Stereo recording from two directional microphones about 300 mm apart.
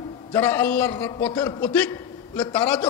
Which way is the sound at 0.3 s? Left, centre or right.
Centre.